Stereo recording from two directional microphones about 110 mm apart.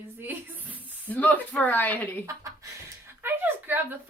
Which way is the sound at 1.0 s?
15° left (ahead or behind).